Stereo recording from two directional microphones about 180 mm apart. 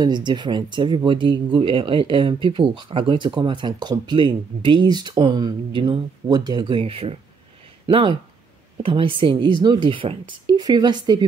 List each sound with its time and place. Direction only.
0.0 s speech: 25° right (ahead or behind)